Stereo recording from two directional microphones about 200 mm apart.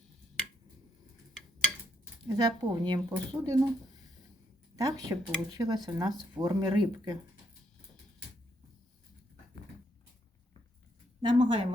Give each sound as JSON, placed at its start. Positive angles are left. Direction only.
{"t": 2.3, "sound": "speech", "side_deg": -20}
{"t": 4.8, "sound": "speech", "side_deg": -20}
{"t": 11.2, "sound": "speech", "side_deg": -25}